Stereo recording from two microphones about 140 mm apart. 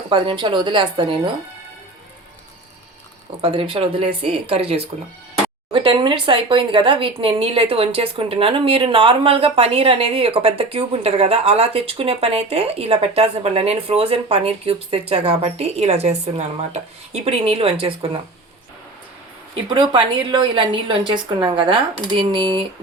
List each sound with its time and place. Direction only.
0.1 s a woman's voice: 35° right (ahead or behind)
3.4 s speech: 40° right (ahead or behind)
19.7 s a woman's voice: 35° right (ahead or behind)